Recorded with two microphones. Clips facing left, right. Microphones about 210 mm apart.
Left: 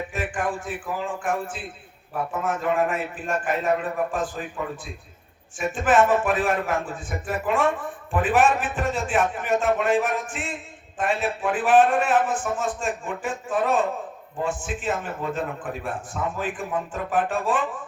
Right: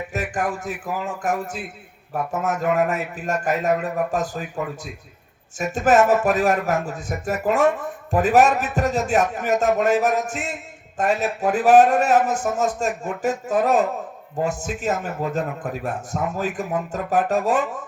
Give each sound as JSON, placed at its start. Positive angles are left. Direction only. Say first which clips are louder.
{"t": 0.1, "sound": "speech", "louder": "right 2 dB", "side_deg": -40}
{"t": 5.5, "sound": "speech", "louder": "right 3 dB", "side_deg": -40}